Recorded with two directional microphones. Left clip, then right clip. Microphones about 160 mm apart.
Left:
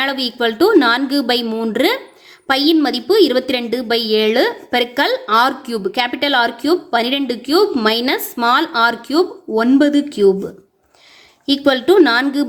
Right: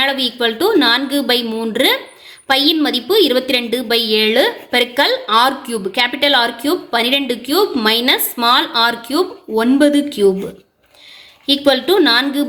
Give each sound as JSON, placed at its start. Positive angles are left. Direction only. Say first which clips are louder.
{"t": 0.0, "sound": "a woman's voice", "louder": "right 2 dB", "side_deg": 40}
{"t": 11.4, "sound": "a woman's voice", "louder": "right 1 dB", "side_deg": 40}